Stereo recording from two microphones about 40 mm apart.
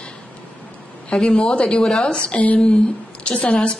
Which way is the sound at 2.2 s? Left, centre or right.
Left.